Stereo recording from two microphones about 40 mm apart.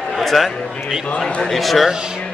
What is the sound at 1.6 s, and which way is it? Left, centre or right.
Speech, centre.